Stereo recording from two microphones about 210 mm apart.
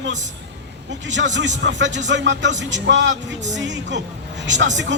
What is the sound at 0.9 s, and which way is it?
Speech, 60° right (ahead or behind).